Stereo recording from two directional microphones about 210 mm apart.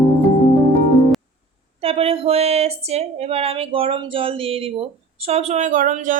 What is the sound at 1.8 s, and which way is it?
Speech, 30° right (ahead or behind).